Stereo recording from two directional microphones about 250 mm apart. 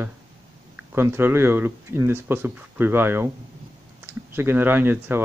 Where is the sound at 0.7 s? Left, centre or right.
Centre.